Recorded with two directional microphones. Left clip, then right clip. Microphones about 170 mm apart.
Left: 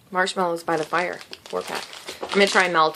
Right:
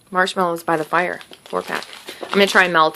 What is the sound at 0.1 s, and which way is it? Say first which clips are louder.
Speech: right 4 dB; 30° right (ahead or behind).